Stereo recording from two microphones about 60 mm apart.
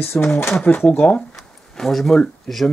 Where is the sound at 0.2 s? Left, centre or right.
Left.